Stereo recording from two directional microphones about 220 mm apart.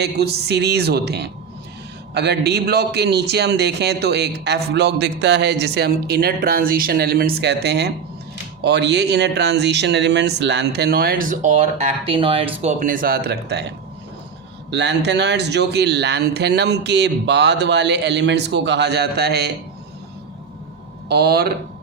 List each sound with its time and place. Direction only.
0.0 s a man's voice: 45° right (ahead or behind); by 12.5 s 25° right (ahead or behind)
12.6 s a man's voice: 35° right (ahead or behind)
21.1 s a man's voice: 45° right (ahead or behind)